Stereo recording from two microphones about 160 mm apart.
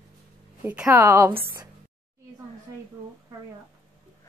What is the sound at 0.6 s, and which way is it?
Speech, 10° right (ahead or behind).